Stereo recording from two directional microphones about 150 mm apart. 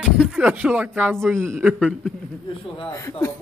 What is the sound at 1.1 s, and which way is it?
Speech, 5° left (ahead or behind).